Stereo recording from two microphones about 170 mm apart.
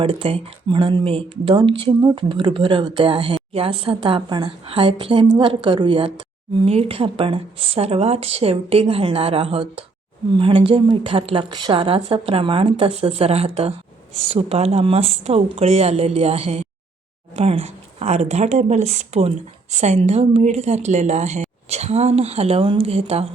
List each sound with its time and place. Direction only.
0.0 s a woman's voice: 30° right (ahead or behind)